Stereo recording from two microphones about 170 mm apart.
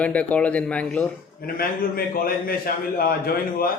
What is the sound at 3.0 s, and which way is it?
Speech, 60° left (ahead or behind).